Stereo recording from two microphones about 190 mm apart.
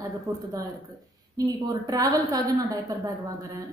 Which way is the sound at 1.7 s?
20° right (ahead or behind).